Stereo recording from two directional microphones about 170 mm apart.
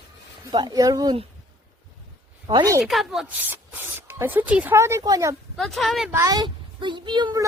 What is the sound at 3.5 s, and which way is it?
Speech, 10° right (ahead or behind).